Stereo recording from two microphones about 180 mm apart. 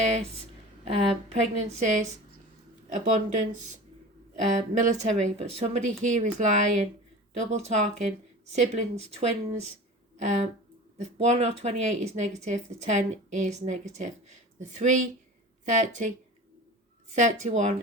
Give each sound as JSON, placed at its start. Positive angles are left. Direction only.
{"t": 0.9, "sound": "a woman's voice", "side_deg": -35}
{"t": 17.2, "sound": "a woman's voice", "side_deg": -40}